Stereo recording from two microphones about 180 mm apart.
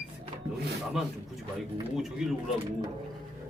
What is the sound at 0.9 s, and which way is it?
Speech, centre (ahead or behind).